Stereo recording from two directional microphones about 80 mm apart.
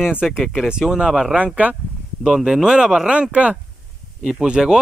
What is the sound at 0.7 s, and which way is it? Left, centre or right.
Speech, centre.